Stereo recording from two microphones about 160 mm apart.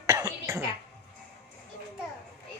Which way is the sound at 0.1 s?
20° right (ahead or behind).